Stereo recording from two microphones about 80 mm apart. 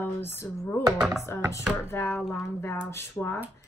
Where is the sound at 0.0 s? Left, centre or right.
Left.